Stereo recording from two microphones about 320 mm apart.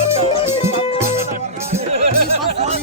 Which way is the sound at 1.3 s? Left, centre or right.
Centre.